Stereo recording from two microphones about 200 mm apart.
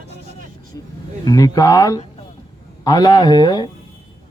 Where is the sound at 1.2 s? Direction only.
15° left (ahead or behind).